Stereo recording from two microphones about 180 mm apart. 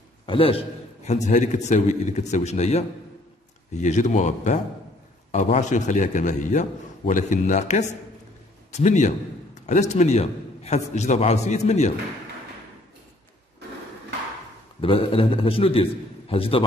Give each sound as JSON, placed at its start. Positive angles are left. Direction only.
{"t": 0.3, "sound": "a man's voice", "side_deg": 30}
{"t": 14.8, "sound": "a man's voice", "side_deg": 30}